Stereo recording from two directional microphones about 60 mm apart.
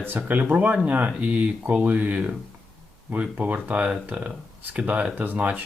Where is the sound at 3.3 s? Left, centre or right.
Right.